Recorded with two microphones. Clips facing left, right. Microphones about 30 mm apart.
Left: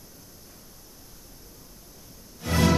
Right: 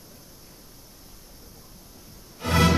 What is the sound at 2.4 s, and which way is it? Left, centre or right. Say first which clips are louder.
Music: right 2 dB; right.